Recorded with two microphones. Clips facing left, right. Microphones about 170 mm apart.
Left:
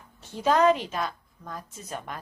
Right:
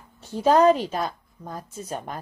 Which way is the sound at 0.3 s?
35° right (ahead or behind).